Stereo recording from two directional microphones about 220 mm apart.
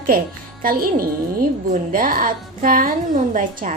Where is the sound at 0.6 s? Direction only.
40° right (ahead or behind).